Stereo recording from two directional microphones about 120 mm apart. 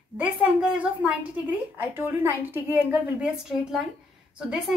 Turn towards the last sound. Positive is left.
turn(degrees=-5)  # may be behind; listen again after turning